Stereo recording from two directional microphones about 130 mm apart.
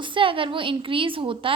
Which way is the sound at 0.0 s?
40° right (ahead or behind).